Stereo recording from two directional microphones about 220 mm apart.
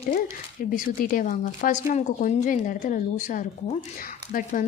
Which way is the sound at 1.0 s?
40° left (ahead or behind).